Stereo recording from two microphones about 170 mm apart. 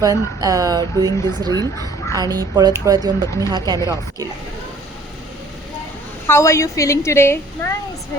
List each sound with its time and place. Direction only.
0.0 s speech: 20° right (ahead or behind)
6.2 s a woman's voice: 15° left (ahead or behind)